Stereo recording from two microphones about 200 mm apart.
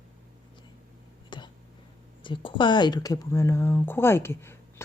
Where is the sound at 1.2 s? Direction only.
25° left (ahead or behind).